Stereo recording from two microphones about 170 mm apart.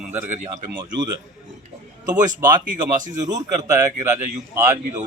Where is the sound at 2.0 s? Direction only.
25° right (ahead or behind).